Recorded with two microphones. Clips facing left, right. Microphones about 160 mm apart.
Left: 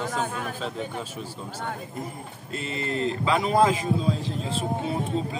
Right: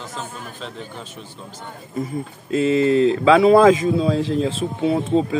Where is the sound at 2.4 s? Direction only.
90° right; by 4.5 s 75° right (ahead or behind).